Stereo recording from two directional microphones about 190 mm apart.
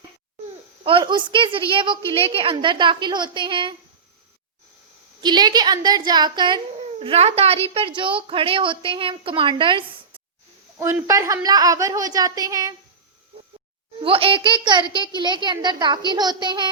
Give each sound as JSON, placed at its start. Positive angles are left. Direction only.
{"t": 0.9, "sound": "a woman's voice", "side_deg": -25}
{"t": 5.2, "sound": "a woman's voice", "side_deg": -20}
{"t": 10.8, "sound": "a woman's voice", "side_deg": -15}
{"t": 14.0, "sound": "a woman's voice", "side_deg": -30}